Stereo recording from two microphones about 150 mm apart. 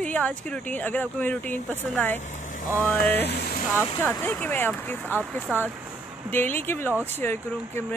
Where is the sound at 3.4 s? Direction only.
90° left.